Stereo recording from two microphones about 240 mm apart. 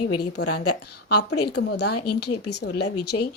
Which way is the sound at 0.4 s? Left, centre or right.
Left.